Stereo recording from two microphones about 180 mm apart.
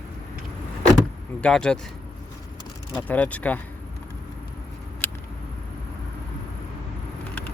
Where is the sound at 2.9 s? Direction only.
10° left (ahead or behind).